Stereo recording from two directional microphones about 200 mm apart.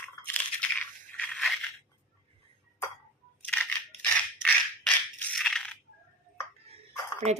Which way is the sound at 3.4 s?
5° left (ahead or behind).